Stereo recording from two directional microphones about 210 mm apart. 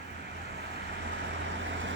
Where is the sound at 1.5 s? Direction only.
60° right (ahead or behind).